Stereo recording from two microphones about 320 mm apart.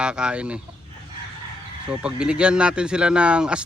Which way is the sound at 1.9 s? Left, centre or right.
Centre.